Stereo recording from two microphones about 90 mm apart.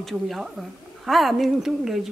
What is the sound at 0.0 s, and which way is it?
Speech, centre (ahead or behind).